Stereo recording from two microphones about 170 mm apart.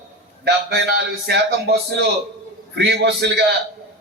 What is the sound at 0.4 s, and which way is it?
A man's voice, 75° right (ahead or behind).